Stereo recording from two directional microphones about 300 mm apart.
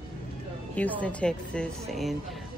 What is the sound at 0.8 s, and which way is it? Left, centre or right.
Speech, centre.